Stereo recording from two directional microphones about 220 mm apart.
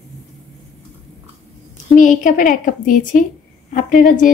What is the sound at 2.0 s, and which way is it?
Speech, 35° left (ahead or behind).